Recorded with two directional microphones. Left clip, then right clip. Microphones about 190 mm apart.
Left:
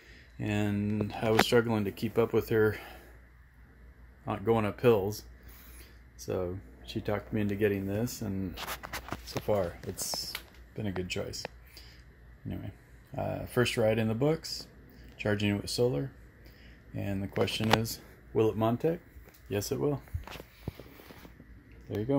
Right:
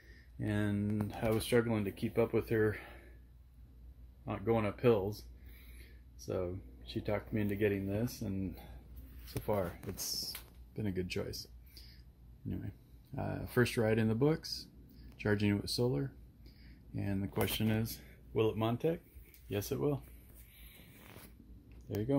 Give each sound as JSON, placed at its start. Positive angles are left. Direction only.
{"t": 0.4, "sound": "speech", "side_deg": 10}
{"t": 4.2, "sound": "speech", "side_deg": 15}
{"t": 6.2, "sound": "speech", "side_deg": 15}
{"t": 10.0, "sound": "a sound", "side_deg": 10}
{"t": 12.4, "sound": "speech", "side_deg": 5}
{"t": 21.8, "sound": "speech", "side_deg": 0}